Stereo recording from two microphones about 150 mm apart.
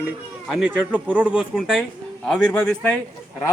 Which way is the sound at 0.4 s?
5° right (ahead or behind).